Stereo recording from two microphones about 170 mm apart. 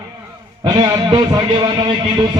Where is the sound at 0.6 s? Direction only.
25° right (ahead or behind).